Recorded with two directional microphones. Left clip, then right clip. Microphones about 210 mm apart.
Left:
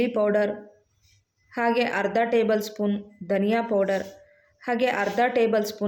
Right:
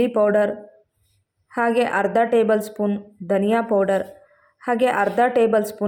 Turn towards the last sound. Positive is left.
turn(degrees=-15)  # may be behind; listen again after turning